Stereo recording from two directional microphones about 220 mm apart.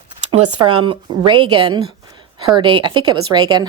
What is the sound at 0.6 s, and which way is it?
A woman's voice, 20° right (ahead or behind).